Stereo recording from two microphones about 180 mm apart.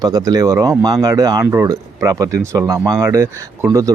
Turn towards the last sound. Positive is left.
turn(degrees=-15)  # may be behind; listen again after turning